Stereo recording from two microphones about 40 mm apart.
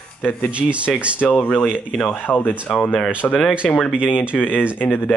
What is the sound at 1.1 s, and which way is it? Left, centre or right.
Speech, left.